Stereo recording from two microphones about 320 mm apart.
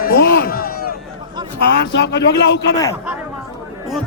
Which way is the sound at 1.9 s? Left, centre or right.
Left.